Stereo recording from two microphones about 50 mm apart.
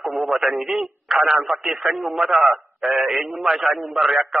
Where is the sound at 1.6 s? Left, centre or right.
Centre.